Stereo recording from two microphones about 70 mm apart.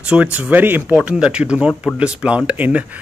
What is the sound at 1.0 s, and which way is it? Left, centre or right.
Speech, centre.